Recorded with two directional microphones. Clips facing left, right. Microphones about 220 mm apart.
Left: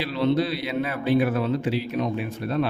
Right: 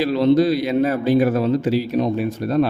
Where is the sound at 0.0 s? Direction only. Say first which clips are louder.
Right 7 dB; 40° right (ahead or behind).